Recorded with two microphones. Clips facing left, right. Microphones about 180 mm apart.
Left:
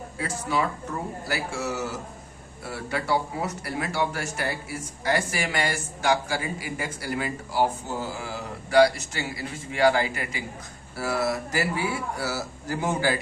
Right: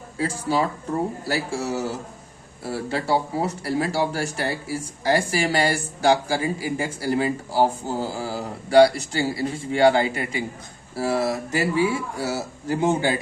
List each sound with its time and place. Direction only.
0.2 s a man's voice: 30° right (ahead or behind)